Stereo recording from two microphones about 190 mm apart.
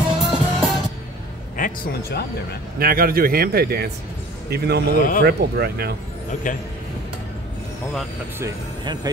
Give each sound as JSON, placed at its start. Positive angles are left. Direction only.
{"t": 0.2, "sound": "music", "side_deg": 0}
{"t": 1.6, "sound": "speech", "side_deg": 55}
{"t": 2.8, "sound": "speech", "side_deg": -50}
{"t": 4.9, "sound": "speech", "side_deg": 45}
{"t": 5.2, "sound": "speech", "side_deg": -55}
{"t": 6.5, "sound": "speech", "side_deg": 45}
{"t": 8.4, "sound": "speech", "side_deg": -20}